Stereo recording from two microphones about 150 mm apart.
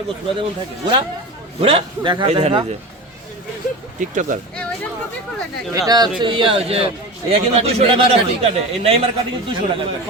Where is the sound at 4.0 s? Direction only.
60° right (ahead or behind).